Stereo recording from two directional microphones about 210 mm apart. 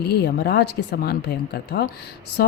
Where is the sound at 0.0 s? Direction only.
50° left (ahead or behind).